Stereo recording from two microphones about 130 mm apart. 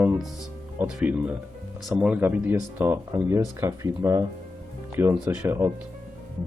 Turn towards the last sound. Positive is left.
turn(degrees=-20)  # may be behind; listen again after turning